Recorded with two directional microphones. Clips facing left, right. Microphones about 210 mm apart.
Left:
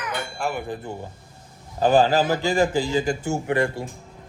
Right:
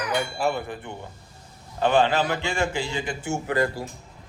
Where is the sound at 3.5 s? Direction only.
25° left (ahead or behind).